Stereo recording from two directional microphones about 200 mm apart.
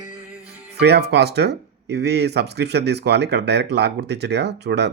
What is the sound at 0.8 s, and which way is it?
Speech, 55° right (ahead or behind).